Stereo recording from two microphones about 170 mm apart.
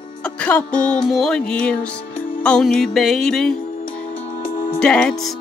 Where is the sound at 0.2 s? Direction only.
5° left (ahead or behind).